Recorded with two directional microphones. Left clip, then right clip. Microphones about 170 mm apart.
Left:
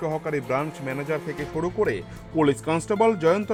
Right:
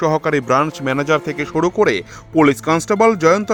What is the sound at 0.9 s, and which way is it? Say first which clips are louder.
Speech: right 11 dB; 65° right (ahead or behind).